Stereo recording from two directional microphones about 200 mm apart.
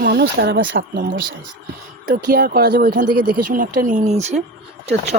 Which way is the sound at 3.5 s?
40° right (ahead or behind).